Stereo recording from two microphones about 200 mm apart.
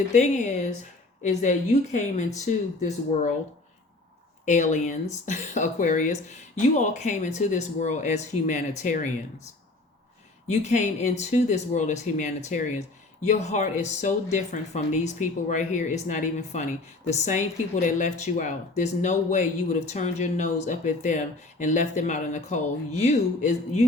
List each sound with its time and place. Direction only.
0.1 s speech: 35° left (ahead or behind)
4.4 s speech: 35° left (ahead or behind)
10.5 s speech: 35° left (ahead or behind)